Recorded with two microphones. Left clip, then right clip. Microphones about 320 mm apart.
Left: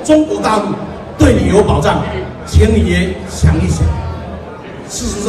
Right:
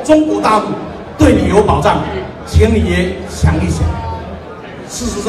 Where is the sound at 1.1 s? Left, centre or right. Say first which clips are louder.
Even; centre.